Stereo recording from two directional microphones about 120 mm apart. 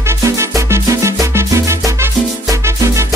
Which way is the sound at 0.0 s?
25° right (ahead or behind).